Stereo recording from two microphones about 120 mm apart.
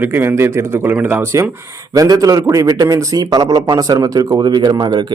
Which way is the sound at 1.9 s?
30° right (ahead or behind).